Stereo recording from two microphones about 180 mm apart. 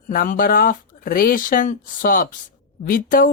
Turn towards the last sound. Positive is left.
turn(degrees=50)  # may be behind; listen again after turning